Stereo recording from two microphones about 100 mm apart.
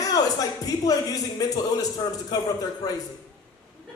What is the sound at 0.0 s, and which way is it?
Speech, 35° left (ahead or behind).